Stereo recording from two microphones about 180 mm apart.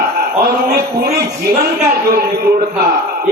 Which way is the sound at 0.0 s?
60° right (ahead or behind).